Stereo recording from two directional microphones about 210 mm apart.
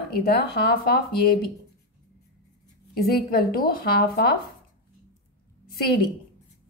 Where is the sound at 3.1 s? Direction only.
45° left (ahead or behind).